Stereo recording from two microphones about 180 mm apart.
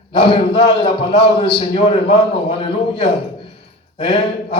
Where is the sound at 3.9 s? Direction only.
30° left (ahead or behind).